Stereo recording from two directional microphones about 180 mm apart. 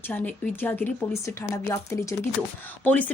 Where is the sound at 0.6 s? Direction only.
10° left (ahead or behind).